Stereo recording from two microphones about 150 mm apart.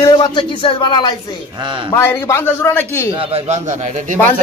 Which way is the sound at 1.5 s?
35° right (ahead or behind).